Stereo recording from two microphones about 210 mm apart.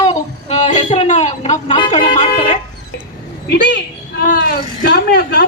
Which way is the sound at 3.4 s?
55° left (ahead or behind).